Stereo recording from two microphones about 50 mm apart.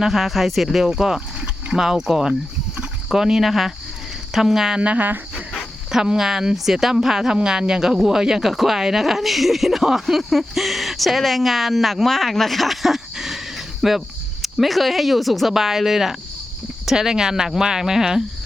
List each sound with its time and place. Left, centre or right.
0.0 s speech: centre
4.8 s speech: right
5.9 s speech: centre